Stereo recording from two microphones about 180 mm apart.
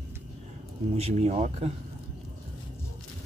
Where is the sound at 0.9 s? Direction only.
35° right (ahead or behind).